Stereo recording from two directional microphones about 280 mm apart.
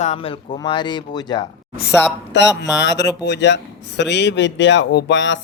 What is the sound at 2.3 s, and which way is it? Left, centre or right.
Speech, left.